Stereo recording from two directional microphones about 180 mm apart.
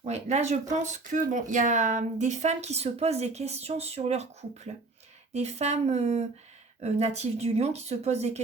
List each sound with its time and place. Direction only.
0.0 s speech: 40° right (ahead or behind)